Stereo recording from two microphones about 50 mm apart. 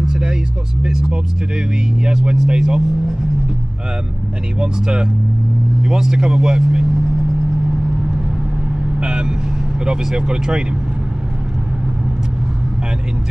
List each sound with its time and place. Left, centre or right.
0.0 s vehicle: centre
2.0 s speech: centre
4.6 s speech: centre
9.0 s vehicle: centre
9.8 s speech: centre